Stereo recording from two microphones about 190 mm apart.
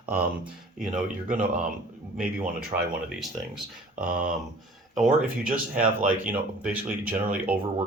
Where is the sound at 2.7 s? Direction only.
30° right (ahead or behind).